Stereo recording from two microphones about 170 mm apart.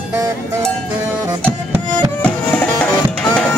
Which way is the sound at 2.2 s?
10° left (ahead or behind).